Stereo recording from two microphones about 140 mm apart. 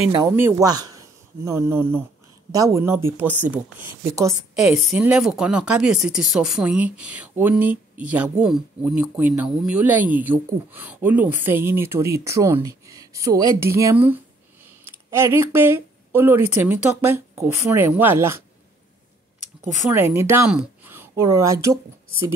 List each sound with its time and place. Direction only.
0.4 s speech: 15° right (ahead or behind)
0.7 s speech: 25° right (ahead or behind)
4.6 s speech: 5° right (ahead or behind)
19.9 s speech: 15° right (ahead or behind)
20.4 s a sound: 10° right (ahead or behind)
21.1 s speech: 20° right (ahead or behind)